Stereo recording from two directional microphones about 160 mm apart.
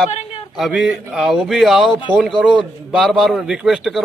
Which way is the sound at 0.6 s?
5° right (ahead or behind).